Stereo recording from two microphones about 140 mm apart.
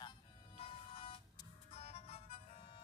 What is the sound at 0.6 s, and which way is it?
Music, 40° left (ahead or behind).